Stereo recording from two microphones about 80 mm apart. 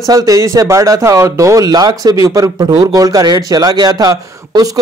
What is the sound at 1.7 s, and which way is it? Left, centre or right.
Speech, right.